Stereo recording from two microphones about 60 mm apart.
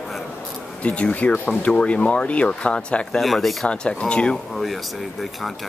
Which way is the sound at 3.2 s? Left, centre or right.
Centre.